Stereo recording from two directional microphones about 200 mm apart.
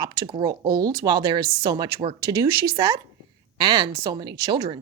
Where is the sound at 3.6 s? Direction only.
20° right (ahead or behind).